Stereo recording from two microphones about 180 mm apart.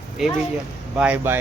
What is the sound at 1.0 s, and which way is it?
Speech, 10° right (ahead or behind).